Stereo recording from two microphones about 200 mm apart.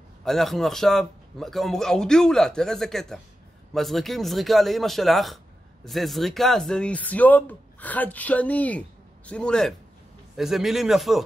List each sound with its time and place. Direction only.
0.2 s a man's voice: centre (ahead or behind)